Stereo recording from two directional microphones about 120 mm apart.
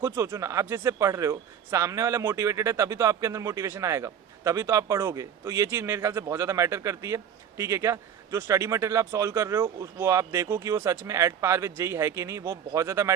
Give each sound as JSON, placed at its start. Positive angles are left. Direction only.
{"t": 0.0, "sound": "speech", "side_deg": -25}